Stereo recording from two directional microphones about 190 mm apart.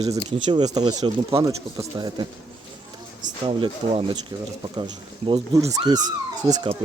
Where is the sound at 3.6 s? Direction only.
25° right (ahead or behind).